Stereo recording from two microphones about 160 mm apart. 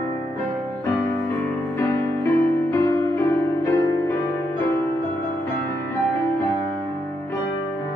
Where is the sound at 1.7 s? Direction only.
15° left (ahead or behind).